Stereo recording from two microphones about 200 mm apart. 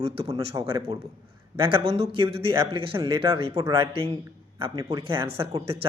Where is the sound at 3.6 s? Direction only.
15° right (ahead or behind).